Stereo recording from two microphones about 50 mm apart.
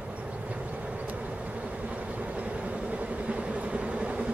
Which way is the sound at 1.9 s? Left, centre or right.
Right.